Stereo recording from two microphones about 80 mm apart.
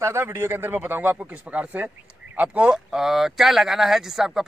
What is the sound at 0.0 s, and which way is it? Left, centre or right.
A man's voice, right.